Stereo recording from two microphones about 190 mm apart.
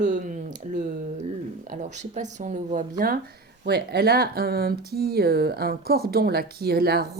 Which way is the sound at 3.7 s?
60° right (ahead or behind).